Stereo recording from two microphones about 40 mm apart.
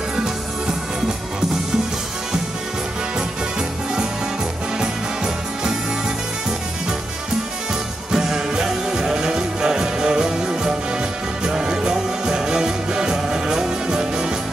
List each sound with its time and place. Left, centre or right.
0.1 s music: centre
4.7 s music: centre
8.1 s music: centre